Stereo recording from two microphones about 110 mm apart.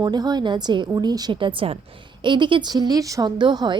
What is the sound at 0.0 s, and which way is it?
A woman's voice, 40° right (ahead or behind).